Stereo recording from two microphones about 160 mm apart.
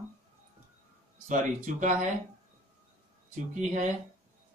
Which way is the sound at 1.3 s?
50° right (ahead or behind).